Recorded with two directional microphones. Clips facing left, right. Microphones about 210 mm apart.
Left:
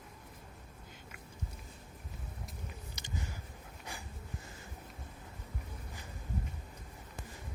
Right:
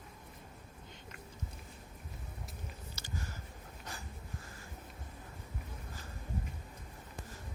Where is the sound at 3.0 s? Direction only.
15° left (ahead or behind).